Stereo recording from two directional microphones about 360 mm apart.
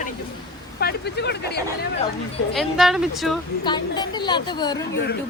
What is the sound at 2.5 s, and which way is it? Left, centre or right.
Speech, centre.